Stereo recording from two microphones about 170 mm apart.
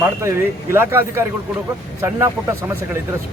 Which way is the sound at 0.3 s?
15° right (ahead or behind).